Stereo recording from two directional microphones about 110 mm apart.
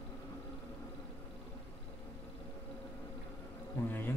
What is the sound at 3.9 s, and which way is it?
Bee, 20° left (ahead or behind).